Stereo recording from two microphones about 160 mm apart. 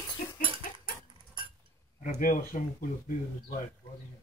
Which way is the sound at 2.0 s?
50° left (ahead or behind).